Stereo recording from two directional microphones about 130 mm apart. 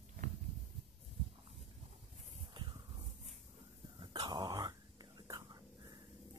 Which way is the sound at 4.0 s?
30° right (ahead or behind).